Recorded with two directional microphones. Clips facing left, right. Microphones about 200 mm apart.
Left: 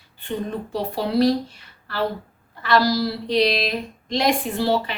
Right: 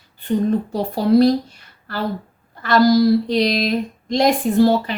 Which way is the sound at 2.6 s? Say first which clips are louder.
Right 6 dB; 45° right (ahead or behind).